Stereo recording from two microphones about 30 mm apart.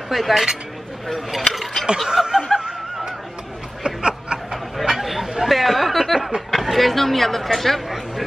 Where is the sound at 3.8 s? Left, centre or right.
Right.